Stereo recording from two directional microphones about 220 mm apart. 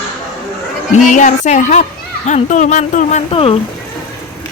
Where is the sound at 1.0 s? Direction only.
35° left (ahead or behind).